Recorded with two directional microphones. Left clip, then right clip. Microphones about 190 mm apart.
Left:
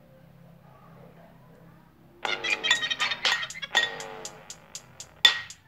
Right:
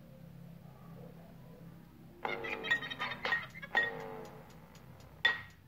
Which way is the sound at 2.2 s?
20° left (ahead or behind).